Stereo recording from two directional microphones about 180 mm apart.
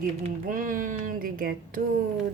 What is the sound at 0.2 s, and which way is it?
Speech, 45° right (ahead or behind).